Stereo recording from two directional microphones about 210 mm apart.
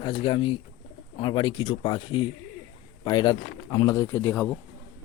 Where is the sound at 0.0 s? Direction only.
25° left (ahead or behind).